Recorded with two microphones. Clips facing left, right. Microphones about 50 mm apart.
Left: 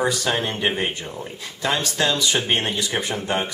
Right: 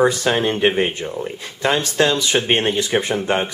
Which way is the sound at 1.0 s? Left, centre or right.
Centre.